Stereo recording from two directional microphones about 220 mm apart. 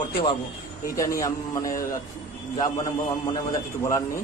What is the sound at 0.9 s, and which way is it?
Speech, 15° left (ahead or behind).